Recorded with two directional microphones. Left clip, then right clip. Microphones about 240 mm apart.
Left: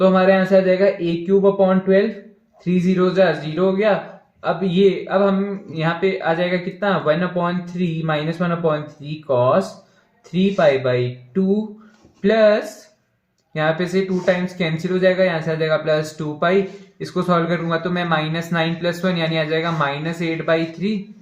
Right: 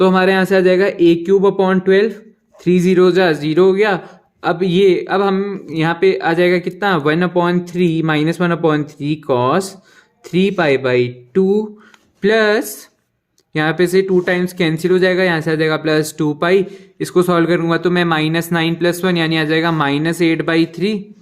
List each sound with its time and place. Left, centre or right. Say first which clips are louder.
0.0 s a man's voice: right 2 dB; right